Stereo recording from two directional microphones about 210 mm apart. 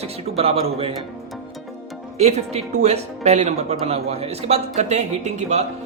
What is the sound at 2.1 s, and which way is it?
A woman's voice, 30° right (ahead or behind).